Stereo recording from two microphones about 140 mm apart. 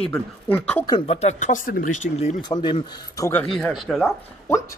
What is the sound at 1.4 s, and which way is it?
Speech, 75° left (ahead or behind).